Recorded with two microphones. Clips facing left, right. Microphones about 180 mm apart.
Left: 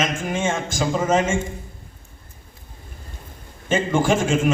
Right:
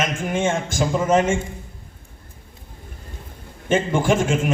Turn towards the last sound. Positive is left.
turn(degrees=-55)  # may be behind; listen again after turning